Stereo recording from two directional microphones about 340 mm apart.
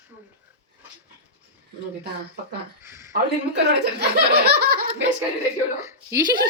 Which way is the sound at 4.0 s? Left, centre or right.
Right.